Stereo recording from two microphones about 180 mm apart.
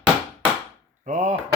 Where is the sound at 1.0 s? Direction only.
45° right (ahead or behind).